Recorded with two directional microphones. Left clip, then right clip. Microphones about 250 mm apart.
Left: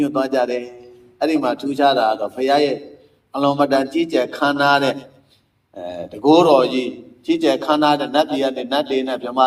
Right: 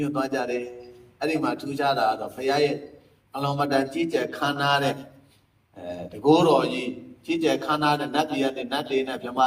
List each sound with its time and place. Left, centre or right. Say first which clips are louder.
0.0 s a man's voice: left 8 dB; centre